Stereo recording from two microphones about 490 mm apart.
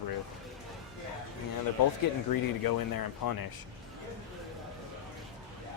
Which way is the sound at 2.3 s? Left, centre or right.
Left.